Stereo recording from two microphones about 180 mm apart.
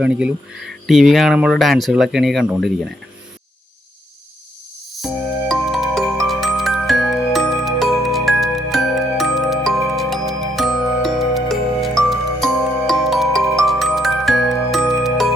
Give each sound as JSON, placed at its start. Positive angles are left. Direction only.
{"t": 0.0, "sound": "speech", "side_deg": -5}
{"t": 5.0, "sound": "music", "side_deg": 0}